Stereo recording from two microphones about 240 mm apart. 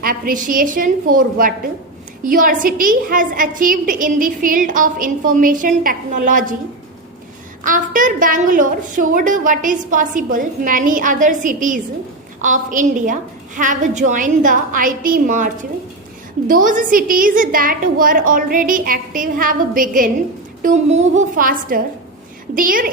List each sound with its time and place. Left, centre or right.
0.0 s a woman's voice: right
7.6 s a woman's voice: right